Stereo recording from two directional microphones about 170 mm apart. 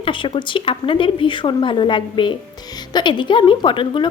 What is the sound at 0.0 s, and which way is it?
A woman's voice, 30° left (ahead or behind).